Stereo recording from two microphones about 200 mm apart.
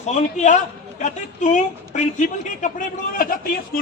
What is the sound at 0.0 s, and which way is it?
A man's voice, 35° left (ahead or behind).